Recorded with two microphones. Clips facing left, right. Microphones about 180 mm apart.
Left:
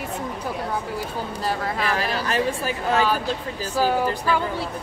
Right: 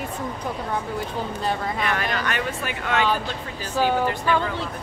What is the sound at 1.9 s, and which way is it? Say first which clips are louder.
Speech: left 2 dB; 30° left (ahead or behind).